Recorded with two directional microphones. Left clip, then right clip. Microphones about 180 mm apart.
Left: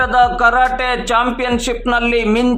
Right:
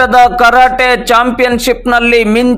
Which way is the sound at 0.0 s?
25° right (ahead or behind).